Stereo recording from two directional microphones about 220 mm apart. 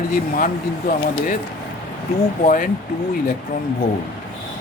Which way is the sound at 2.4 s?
40° left (ahead or behind).